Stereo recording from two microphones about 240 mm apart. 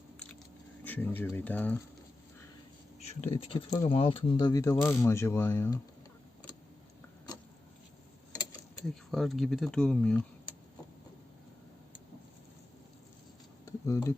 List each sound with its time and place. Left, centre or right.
0.9 s speech: centre
3.0 s speech: left; by 5.8 s centre
9.0 s speech: centre
13.7 s a sound: centre